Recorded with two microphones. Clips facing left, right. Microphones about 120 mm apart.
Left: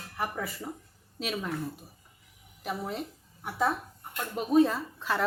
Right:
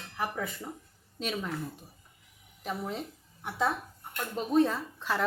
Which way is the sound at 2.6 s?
5° left (ahead or behind).